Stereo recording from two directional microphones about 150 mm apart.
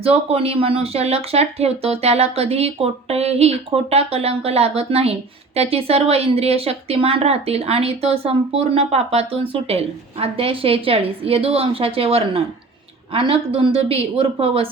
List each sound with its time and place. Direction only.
0.0 s a woman's voice: 40° right (ahead or behind)